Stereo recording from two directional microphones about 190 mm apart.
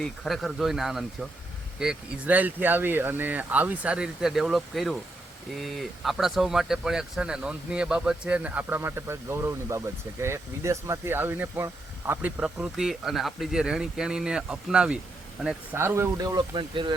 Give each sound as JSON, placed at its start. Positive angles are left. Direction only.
{"t": 0.0, "sound": "speech", "side_deg": 0}